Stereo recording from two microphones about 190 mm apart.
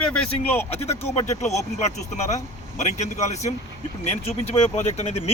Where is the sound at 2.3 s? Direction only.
40° left (ahead or behind).